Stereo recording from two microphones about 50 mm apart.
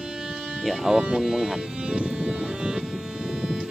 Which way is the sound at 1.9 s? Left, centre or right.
Right.